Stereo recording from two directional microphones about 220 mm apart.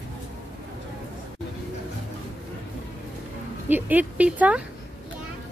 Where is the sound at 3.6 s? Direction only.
10° right (ahead or behind).